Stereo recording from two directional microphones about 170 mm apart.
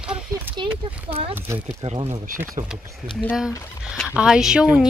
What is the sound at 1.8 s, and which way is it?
Speech, 35° right (ahead or behind).